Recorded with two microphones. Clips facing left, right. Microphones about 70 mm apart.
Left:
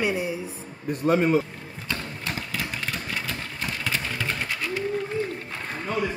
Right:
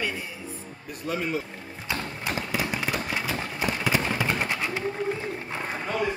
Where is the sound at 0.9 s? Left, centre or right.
Left.